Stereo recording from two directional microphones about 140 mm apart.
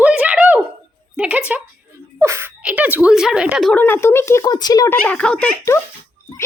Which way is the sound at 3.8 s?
15° left (ahead or behind).